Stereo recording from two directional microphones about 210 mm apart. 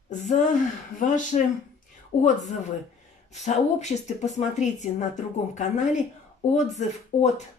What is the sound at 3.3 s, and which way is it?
A woman's voice, 35° left (ahead or behind).